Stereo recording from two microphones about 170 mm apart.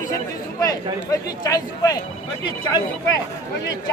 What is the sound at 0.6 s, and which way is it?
Speech, 20° left (ahead or behind).